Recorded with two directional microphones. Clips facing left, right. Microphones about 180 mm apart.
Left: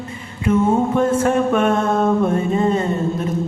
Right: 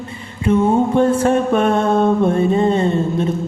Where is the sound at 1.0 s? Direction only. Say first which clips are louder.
Right 2 dB; 35° right (ahead or behind).